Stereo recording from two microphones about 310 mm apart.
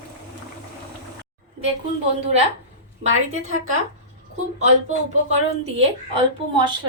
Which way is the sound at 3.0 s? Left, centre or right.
Right.